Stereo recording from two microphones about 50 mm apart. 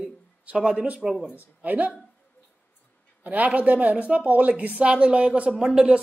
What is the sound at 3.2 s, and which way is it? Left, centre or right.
Speech, right.